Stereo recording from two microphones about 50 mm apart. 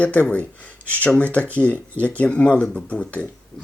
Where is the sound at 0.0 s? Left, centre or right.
Left.